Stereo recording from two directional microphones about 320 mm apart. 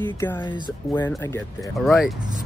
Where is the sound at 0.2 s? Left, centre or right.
Centre.